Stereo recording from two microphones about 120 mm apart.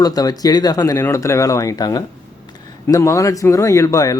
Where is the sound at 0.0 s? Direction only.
30° left (ahead or behind).